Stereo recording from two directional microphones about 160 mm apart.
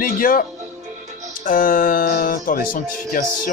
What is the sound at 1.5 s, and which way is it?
Speech, 60° left (ahead or behind).